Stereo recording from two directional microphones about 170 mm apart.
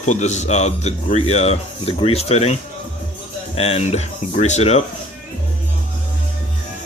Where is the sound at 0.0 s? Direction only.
45° left (ahead or behind).